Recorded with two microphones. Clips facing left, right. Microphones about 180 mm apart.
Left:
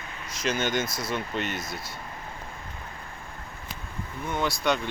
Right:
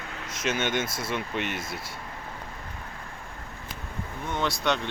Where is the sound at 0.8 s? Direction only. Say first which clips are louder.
Even; 25° right (ahead or behind).